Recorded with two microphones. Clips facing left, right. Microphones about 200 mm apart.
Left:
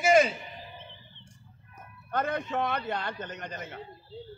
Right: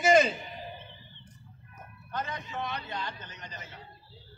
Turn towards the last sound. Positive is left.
turn(degrees=55)  # may be behind; listen again after turning